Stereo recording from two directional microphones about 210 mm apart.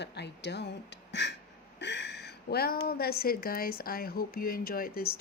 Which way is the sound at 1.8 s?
55° left (ahead or behind).